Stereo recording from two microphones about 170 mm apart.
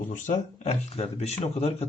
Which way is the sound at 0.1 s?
40° left (ahead or behind).